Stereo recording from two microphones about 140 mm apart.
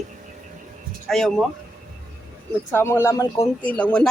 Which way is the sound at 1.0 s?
Centre (ahead or behind).